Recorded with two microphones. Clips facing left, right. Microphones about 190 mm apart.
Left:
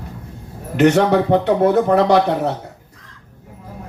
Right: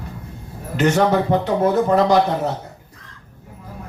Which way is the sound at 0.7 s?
65° left (ahead or behind).